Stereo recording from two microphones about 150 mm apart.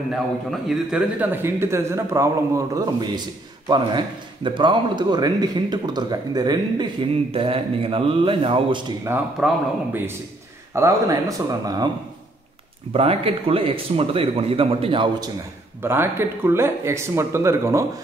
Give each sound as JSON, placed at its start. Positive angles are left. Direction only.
{"t": 0.1, "sound": "a man's voice", "side_deg": 0}
{"t": 1.2, "sound": "speech", "side_deg": -15}
{"t": 7.2, "sound": "speech", "side_deg": -40}
{"t": 9.1, "sound": "speech", "side_deg": -15}
{"t": 10.7, "sound": "speech", "side_deg": -20}
{"t": 12.9, "sound": "speech", "side_deg": -40}
{"t": 15.8, "sound": "speech", "side_deg": -15}